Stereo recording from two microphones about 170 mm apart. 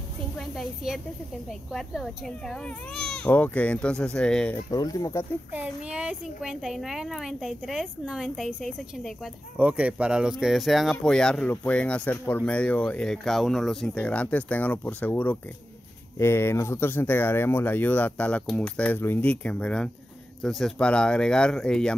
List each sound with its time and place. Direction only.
0.4 s a woman's voice: centre (ahead or behind)
4.6 s speech: 20° left (ahead or behind)
5.5 s speech: 10° right (ahead or behind)